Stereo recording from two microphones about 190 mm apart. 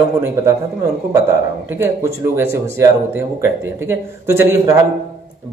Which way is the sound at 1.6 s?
10° right (ahead or behind).